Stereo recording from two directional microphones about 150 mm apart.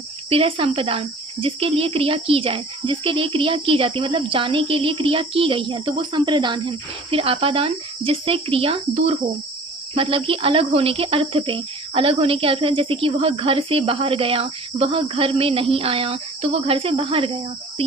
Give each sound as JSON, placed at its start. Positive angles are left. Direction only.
{"t": 0.3, "sound": "speech", "side_deg": -40}